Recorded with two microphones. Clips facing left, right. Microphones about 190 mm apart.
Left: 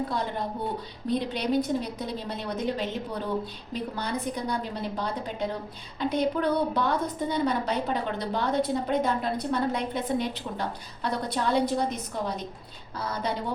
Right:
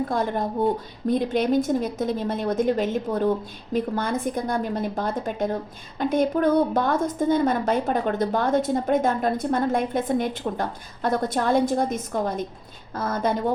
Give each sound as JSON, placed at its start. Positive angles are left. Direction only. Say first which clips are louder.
{"t": 1.0, "sound": "a woman's voice", "louder": "right 6 dB", "side_deg": -50}